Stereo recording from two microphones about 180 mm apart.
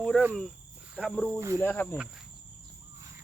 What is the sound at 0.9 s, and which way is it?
Speech, 5° left (ahead or behind).